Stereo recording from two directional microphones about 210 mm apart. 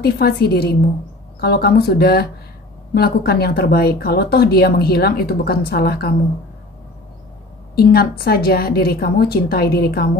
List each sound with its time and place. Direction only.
0.0 s speech: 50° left (ahead or behind)
7.7 s speech: 45° left (ahead or behind)